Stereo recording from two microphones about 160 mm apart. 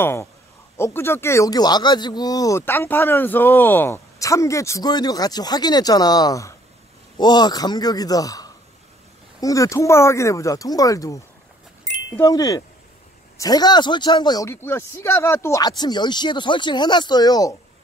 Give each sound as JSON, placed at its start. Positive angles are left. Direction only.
{"t": 0.0, "sound": "a man's voice", "side_deg": 15}